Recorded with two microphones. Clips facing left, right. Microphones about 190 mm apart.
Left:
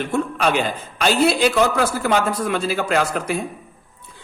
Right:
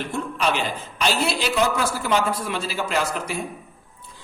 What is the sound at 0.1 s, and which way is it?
A man's voice, 50° left (ahead or behind).